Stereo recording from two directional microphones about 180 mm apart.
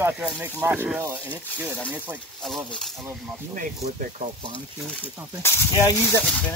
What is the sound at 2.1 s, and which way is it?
Speech, 5° left (ahead or behind).